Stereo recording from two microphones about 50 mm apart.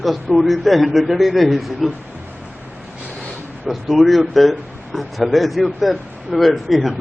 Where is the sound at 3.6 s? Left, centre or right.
Centre.